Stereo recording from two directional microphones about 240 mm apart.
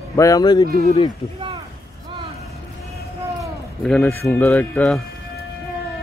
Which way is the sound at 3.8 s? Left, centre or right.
Centre.